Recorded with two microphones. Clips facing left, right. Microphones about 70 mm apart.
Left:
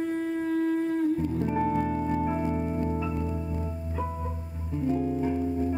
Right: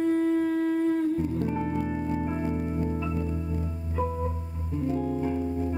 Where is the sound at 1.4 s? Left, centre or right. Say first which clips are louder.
Left 2 dB; centre.